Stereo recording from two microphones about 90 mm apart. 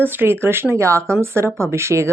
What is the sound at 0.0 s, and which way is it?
Speech, 25° right (ahead or behind).